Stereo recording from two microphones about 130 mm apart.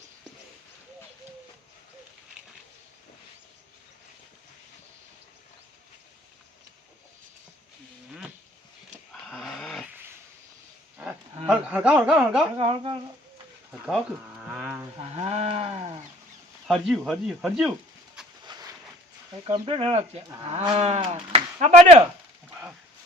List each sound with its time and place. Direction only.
9.2 s dog: centre (ahead or behind)
11.4 s speech: 10° right (ahead or behind)
12.5 s speech: 45° right (ahead or behind)
13.8 s livestock: 5° right (ahead or behind)
14.9 s livestock: 55° right (ahead or behind)
16.6 s speech: centre (ahead or behind)
18.4 s a sound: 30° right (ahead or behind)
19.5 s speech: 45° right (ahead or behind)